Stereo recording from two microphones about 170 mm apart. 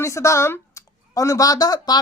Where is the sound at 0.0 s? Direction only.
15° left (ahead or behind).